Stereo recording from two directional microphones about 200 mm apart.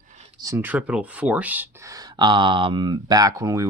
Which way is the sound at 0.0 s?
40° right (ahead or behind).